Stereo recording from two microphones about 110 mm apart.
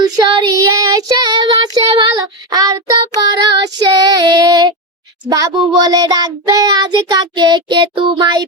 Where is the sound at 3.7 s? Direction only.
35° right (ahead or behind).